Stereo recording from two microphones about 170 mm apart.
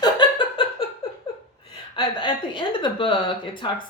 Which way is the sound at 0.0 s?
25° left (ahead or behind).